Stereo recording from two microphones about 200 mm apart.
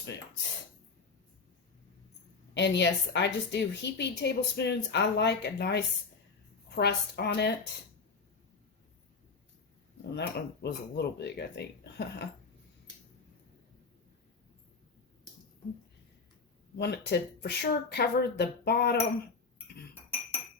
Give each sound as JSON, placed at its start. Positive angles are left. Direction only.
{"t": 2.6, "sound": "a woman's voice", "side_deg": 60}
{"t": 10.2, "sound": "a woman's voice", "side_deg": 55}
{"t": 16.7, "sound": "a woman's voice", "side_deg": 55}